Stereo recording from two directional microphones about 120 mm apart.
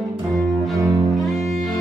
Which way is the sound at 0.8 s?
30° right (ahead or behind).